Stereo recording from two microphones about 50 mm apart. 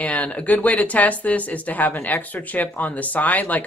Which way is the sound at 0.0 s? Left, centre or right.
Left.